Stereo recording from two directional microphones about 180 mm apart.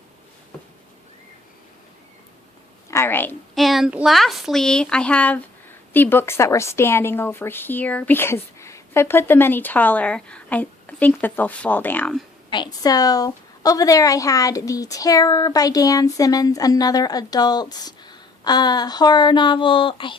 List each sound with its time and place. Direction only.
2.9 s a woman's voice: 15° left (ahead or behind)
3.5 s a woman's voice: centre (ahead or behind)
12.5 s a woman's voice: 25° left (ahead or behind)